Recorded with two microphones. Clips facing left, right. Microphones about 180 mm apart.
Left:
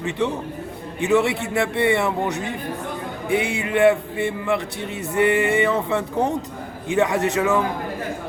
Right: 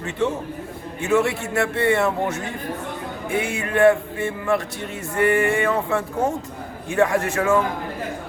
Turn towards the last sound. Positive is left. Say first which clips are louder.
# even
turn(degrees=20)  # may be behind; listen again after turning